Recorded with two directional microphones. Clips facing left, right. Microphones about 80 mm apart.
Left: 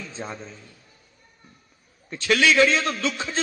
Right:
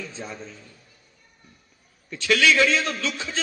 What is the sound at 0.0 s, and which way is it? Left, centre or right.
Speech, left.